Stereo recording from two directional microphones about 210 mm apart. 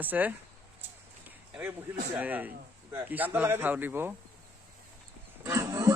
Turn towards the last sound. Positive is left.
turn(degrees=-15)  # may be behind; listen again after turning